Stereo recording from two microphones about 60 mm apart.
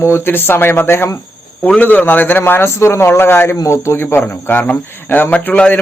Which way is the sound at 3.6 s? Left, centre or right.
Left.